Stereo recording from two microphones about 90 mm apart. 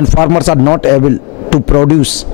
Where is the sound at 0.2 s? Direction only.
20° left (ahead or behind).